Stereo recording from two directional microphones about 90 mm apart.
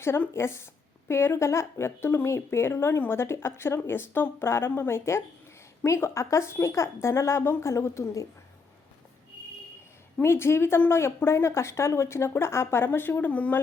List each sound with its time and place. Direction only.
0.0 s a woman's voice: 30° left (ahead or behind)
10.2 s a woman's voice: 30° left (ahead or behind)